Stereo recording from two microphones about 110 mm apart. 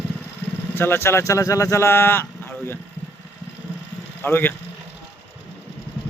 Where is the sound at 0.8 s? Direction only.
20° left (ahead or behind).